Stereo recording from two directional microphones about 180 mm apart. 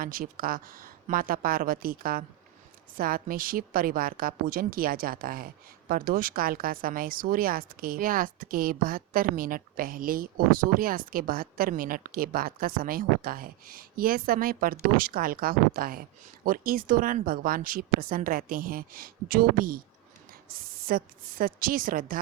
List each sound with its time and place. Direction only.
0.0 s speech: 50° right (ahead or behind)